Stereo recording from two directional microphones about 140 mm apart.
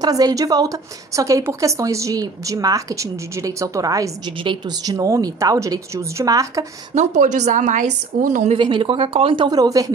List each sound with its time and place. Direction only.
0.0 s a woman's voice: 25° right (ahead or behind)
7.0 s a woman's voice: 60° right (ahead or behind)
8.5 s speech: 35° right (ahead or behind)